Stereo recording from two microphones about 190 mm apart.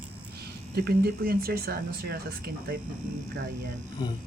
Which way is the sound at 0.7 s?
55° right (ahead or behind).